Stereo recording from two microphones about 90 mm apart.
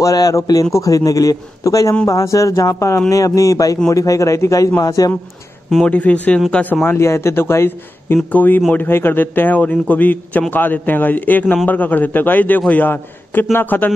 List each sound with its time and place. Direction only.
0.0 s a man's voice: 40° left (ahead or behind)
5.9 s a man's voice: 15° left (ahead or behind)